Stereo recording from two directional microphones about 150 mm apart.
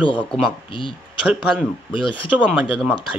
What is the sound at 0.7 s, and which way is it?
Speech, 35° left (ahead or behind).